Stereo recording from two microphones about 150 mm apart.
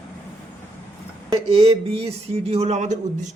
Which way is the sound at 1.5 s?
40° right (ahead or behind).